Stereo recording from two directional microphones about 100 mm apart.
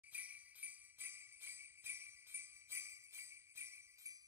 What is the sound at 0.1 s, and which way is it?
Jingle bell, 15° right (ahead or behind).